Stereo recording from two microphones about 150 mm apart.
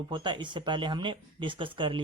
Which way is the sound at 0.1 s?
30° right (ahead or behind).